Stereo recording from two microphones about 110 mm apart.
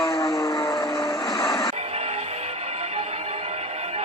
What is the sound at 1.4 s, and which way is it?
Music, 35° left (ahead or behind).